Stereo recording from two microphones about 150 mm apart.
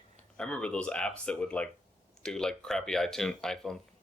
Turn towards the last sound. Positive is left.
turn(degrees=5)  # may be behind; listen again after turning